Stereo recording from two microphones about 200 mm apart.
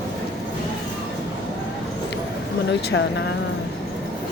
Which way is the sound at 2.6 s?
60° left (ahead or behind).